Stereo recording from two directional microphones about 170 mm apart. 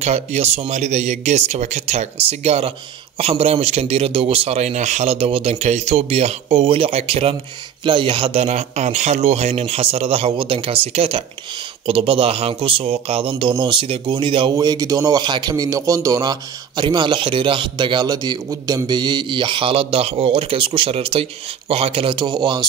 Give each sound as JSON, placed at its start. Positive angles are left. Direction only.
{"t": 0.0, "sound": "a man's voice", "side_deg": -40}